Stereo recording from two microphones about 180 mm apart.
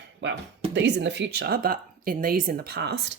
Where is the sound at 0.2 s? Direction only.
90° right.